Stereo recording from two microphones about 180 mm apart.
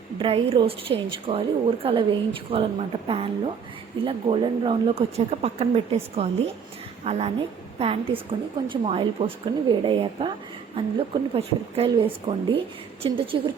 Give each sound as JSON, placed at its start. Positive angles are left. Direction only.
{"t": 0.2, "sound": "a woman's voice", "side_deg": -30}
{"t": 12.3, "sound": "speech", "side_deg": -20}